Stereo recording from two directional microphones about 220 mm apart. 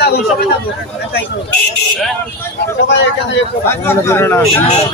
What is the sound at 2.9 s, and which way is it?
Speech, 55° left (ahead or behind).